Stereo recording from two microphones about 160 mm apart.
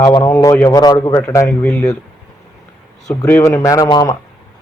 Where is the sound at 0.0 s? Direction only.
20° left (ahead or behind).